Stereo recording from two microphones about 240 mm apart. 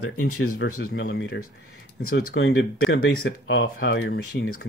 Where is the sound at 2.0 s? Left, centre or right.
Left.